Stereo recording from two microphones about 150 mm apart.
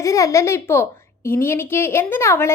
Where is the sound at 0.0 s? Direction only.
20° left (ahead or behind).